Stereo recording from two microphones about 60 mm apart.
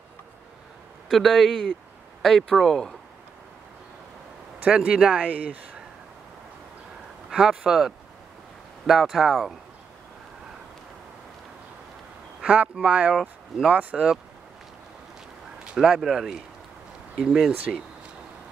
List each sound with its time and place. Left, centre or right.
1.1 s speech: centre
4.7 s speech: centre
7.2 s a man's voice: centre
12.4 s a man's voice: centre
13.1 s speech: centre
13.7 s speech: right
15.6 s speech: centre
17.1 s a man's voice: centre